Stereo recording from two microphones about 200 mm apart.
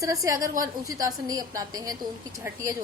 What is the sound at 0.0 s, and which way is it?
A woman's voice, 15° right (ahead or behind).